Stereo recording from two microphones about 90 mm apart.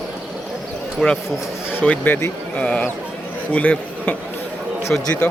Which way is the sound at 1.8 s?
15° left (ahead or behind).